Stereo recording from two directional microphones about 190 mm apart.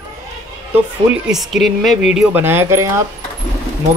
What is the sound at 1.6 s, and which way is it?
Speech, centre (ahead or behind).